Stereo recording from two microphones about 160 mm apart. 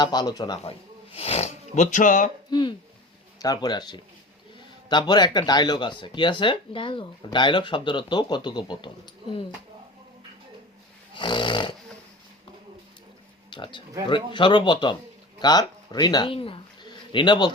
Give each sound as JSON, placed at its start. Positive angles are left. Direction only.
{"t": 0.0, "sound": "speech", "side_deg": 25}
{"t": 0.6, "sound": "speech", "side_deg": 40}
{"t": 2.5, "sound": "speech", "side_deg": 30}
{"t": 11.1, "sound": "dog", "side_deg": 30}
{"t": 13.5, "sound": "speech", "side_deg": 30}